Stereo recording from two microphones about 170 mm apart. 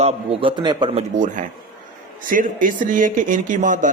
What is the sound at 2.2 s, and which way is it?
Speech, 55° right (ahead or behind).